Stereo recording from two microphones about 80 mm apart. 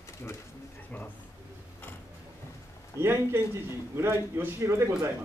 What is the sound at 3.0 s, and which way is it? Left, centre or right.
Speech, right.